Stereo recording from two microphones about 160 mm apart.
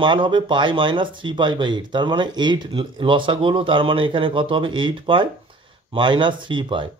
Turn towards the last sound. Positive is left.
turn(degrees=-30)  # may be behind; listen again after turning